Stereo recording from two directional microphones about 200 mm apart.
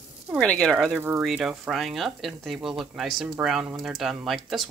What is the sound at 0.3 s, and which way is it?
Speech, 5° left (ahead or behind).